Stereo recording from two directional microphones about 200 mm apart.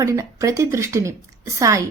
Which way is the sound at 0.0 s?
15° right (ahead or behind).